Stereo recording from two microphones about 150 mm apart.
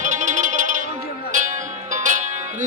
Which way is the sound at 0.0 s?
55° right (ahead or behind).